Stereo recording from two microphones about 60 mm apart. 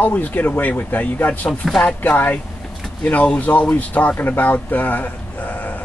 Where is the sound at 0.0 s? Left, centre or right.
Left.